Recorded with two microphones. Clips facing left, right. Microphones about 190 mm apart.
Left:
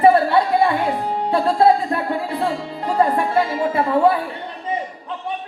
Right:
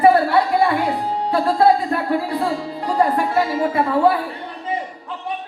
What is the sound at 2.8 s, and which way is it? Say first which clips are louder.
Music: left 1 dB; 25° left (ahead or behind).